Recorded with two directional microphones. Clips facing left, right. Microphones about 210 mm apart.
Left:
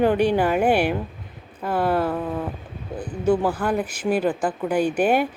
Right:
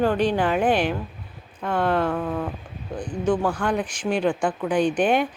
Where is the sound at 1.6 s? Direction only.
5° left (ahead or behind).